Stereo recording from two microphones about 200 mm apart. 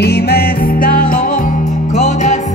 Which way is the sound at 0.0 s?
55° left (ahead or behind).